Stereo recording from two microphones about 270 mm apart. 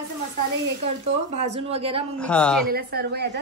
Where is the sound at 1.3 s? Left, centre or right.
Right.